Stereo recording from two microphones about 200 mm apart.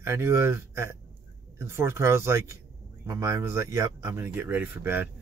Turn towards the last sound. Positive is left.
turn(degrees=-10)  # may be behind; listen again after turning